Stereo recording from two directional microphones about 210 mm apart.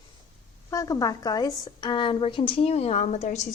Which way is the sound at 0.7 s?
15° left (ahead or behind).